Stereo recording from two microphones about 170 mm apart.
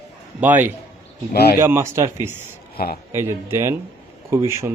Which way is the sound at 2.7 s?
60° left (ahead or behind).